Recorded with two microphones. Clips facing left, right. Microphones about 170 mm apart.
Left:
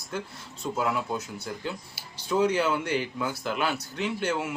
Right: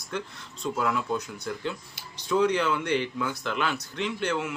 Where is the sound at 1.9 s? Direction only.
10° left (ahead or behind).